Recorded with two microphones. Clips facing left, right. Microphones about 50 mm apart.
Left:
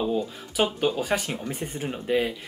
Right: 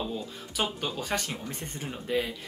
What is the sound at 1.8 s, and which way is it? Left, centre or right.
Speech, left.